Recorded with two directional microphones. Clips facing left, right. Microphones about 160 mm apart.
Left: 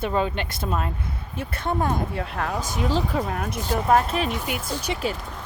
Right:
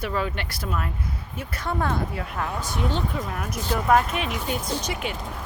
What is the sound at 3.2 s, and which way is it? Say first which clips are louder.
Speech: left 4 dB; 45° left (ahead or behind).